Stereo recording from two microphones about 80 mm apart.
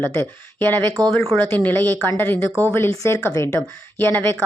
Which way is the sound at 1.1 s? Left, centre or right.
Centre.